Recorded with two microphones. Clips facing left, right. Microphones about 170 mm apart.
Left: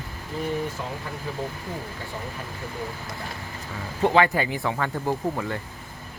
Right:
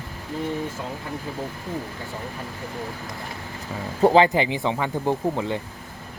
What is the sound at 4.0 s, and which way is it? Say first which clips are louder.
Speech: right 4 dB; 35° right (ahead or behind).